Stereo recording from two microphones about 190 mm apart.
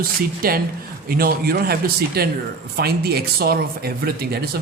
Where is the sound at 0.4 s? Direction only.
50° right (ahead or behind).